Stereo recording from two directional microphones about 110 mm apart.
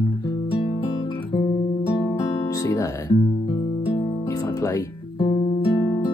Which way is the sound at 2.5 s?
30° left (ahead or behind).